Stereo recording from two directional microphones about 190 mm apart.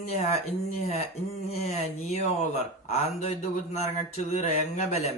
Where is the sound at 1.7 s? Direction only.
35° left (ahead or behind).